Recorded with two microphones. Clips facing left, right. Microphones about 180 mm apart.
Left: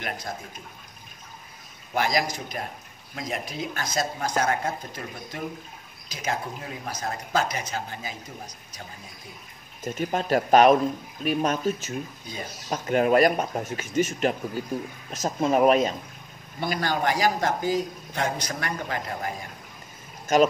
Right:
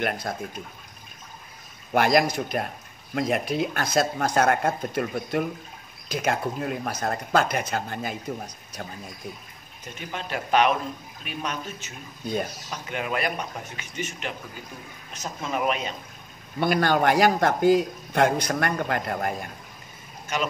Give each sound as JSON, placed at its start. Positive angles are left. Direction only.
{"t": 0.3, "sound": "a man's voice", "side_deg": -60}
{"t": 2.0, "sound": "a man's voice", "side_deg": -60}
{"t": 9.8, "sound": "speech", "side_deg": 40}
{"t": 16.5, "sound": "a man's voice", "side_deg": -65}